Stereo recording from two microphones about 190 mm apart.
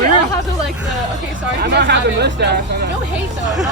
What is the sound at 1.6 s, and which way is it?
Speech, 60° right (ahead or behind).